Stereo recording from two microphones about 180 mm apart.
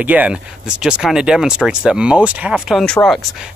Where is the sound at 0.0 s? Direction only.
10° right (ahead or behind).